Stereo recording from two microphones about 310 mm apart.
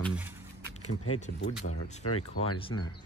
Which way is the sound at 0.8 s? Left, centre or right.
Left.